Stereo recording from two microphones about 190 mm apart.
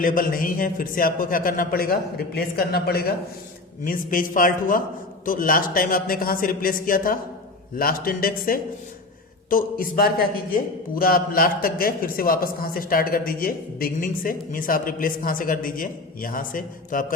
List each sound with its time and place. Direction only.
0.0 s a man's voice: 45° left (ahead or behind)